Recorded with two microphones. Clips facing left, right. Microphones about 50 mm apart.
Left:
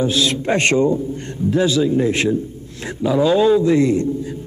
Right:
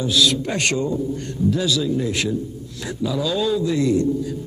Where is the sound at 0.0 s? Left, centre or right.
Left.